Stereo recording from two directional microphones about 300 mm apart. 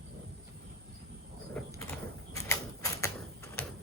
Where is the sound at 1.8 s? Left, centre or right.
Centre.